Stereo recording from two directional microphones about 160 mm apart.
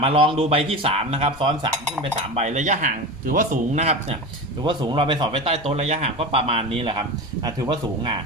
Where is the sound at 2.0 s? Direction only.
45° right (ahead or behind).